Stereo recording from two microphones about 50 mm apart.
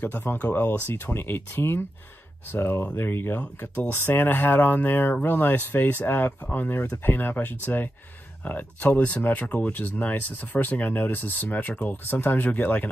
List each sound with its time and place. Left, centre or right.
0.3 s speech: left